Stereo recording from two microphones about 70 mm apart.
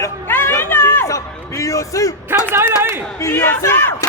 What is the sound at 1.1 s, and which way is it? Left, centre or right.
Speech, left.